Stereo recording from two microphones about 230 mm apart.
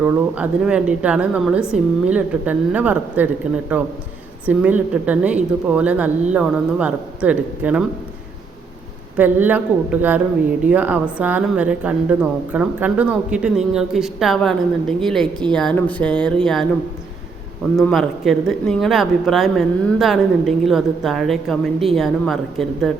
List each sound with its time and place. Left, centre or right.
0.0 s speech: centre
9.1 s speech: centre
17.7 s speech: centre